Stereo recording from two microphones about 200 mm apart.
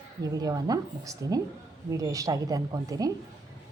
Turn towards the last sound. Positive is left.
turn(degrees=-15)  # may be behind; listen again after turning